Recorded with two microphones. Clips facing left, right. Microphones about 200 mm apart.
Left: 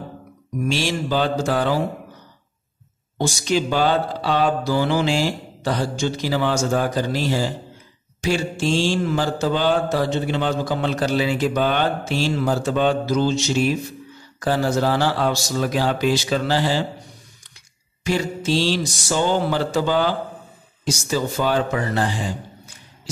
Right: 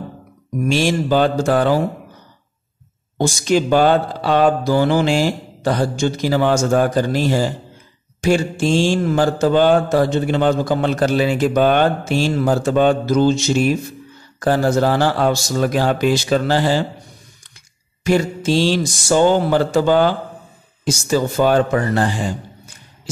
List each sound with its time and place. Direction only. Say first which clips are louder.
0.7 s mantra: right 6 dB; 50° right (ahead or behind)
3.2 s mantra: right 4 dB; 50° right (ahead or behind)
18.0 s mantra: right 5 dB; 50° right (ahead or behind)